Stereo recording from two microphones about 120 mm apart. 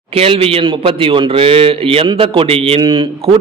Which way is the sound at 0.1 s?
55° right (ahead or behind).